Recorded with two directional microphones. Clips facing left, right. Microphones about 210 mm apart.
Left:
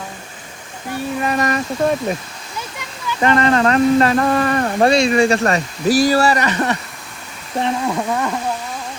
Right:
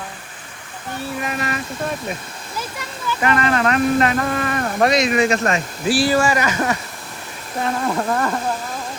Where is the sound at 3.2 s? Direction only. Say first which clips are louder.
Left 4 dB; 30° left (ahead or behind).